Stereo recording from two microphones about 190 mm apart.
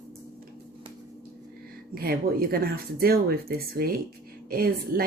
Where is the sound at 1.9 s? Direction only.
50° right (ahead or behind).